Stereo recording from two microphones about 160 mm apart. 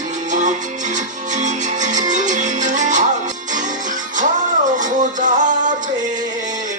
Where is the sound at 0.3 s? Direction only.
50° right (ahead or behind).